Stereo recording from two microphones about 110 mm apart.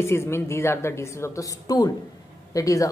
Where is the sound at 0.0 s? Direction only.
25° left (ahead or behind).